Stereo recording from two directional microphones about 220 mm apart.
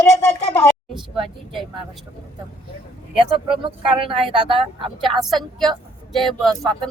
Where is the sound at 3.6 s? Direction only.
25° right (ahead or behind).